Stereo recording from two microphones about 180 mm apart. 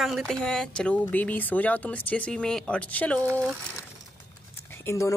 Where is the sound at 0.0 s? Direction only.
Centre (ahead or behind).